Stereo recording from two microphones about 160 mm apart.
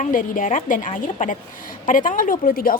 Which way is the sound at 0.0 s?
55° left (ahead or behind).